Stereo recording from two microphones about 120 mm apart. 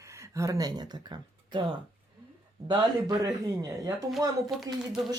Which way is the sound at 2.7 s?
35° right (ahead or behind).